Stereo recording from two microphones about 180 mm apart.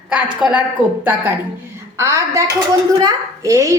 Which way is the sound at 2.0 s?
15° right (ahead or behind).